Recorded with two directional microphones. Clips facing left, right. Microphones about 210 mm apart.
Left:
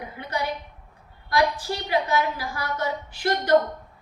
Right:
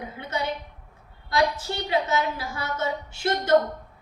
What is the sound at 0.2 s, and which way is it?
A woman's voice, 25° right (ahead or behind).